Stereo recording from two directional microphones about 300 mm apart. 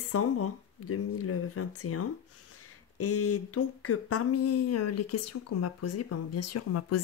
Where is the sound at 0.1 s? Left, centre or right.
Left.